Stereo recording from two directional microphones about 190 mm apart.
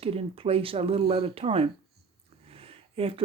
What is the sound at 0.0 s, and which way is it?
Speech, 30° right (ahead or behind).